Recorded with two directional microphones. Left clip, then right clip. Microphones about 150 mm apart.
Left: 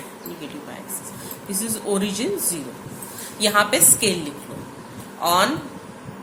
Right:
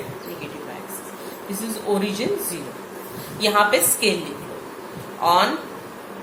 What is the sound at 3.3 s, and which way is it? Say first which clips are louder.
Speech: right 1 dB; 45° left (ahead or behind).